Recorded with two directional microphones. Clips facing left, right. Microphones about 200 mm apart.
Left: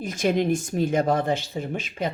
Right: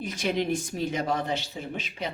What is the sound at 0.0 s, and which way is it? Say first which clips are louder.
A woman's voice: left 5 dB; 45° left (ahead or behind).